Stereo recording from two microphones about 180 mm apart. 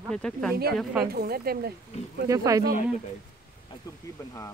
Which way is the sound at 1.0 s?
60° right (ahead or behind).